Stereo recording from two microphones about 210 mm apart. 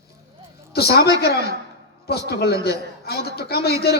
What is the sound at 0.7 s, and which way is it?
A man's voice, 50° left (ahead or behind).